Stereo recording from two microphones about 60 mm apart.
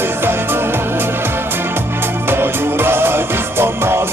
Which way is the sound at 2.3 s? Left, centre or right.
Right.